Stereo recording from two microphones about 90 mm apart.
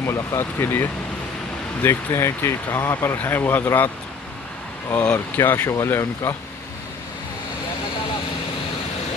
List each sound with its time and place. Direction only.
0.0 s speech: 30° left (ahead or behind)
4.9 s speech: 15° left (ahead or behind)